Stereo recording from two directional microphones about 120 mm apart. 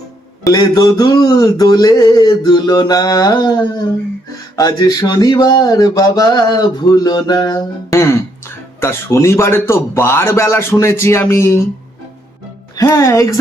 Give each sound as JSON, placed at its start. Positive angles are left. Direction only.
{"t": 0.4, "sound": "a sound", "side_deg": 35}
{"t": 7.9, "sound": "speech", "side_deg": 20}
{"t": 12.7, "sound": "speech", "side_deg": 25}